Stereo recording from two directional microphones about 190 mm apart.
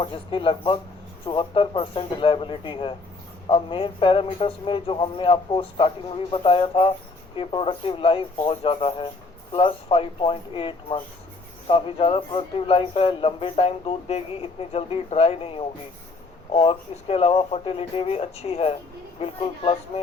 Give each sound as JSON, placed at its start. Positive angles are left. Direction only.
{"t": 0.0, "sound": "a man's voice", "side_deg": 25}